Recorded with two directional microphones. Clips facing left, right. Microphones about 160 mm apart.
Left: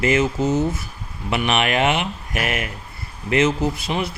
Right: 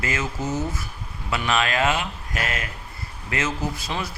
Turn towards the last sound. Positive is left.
turn(degrees=20)  # may be behind; listen again after turning